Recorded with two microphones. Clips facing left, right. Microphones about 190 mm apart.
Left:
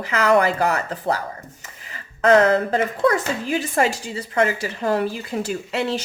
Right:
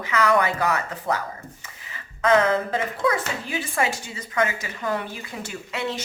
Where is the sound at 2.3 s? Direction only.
40° left (ahead or behind).